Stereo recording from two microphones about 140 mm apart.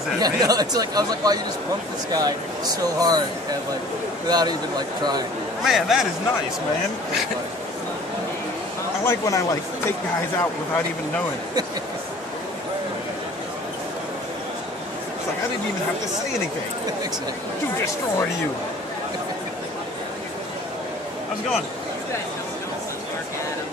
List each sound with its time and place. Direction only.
0.2 s speech: 30° right (ahead or behind)
4.3 s speech: 30° right (ahead or behind)
5.6 s speech: centre (ahead or behind)
9.0 s speech: 20° left (ahead or behind)